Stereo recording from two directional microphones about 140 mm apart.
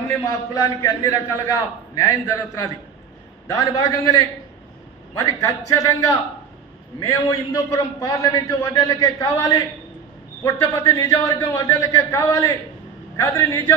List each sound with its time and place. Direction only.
0.1 s a man's voice: 20° left (ahead or behind)
5.1 s a man's voice: 25° left (ahead or behind)